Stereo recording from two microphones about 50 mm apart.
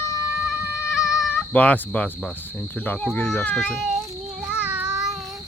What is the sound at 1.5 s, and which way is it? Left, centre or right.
Speech, left.